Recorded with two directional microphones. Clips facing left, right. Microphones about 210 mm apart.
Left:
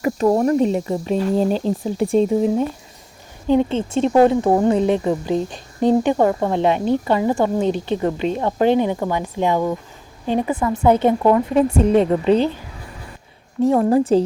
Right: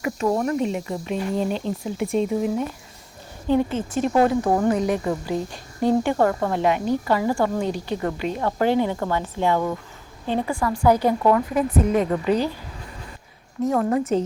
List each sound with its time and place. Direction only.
0.0 s speech: 35° left (ahead or behind)
3.4 s speech: 20° left (ahead or behind)
13.6 s speech: 30° left (ahead or behind)